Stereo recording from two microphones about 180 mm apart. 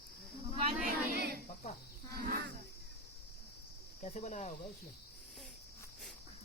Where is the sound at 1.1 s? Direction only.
60° right (ahead or behind).